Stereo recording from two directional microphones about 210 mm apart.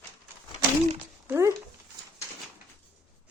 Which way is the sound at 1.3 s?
10° right (ahead or behind).